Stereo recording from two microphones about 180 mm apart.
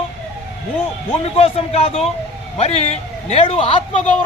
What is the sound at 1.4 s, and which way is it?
A man's voice, 35° left (ahead or behind).